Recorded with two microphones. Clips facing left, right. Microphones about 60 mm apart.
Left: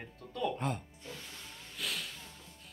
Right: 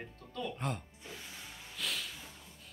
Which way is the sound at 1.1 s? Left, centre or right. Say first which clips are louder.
Right 2 dB; centre.